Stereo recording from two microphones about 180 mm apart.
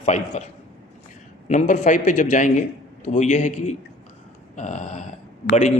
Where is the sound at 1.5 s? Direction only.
45° left (ahead or behind).